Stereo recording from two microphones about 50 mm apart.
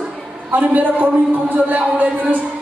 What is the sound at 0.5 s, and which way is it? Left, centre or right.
Speech, right.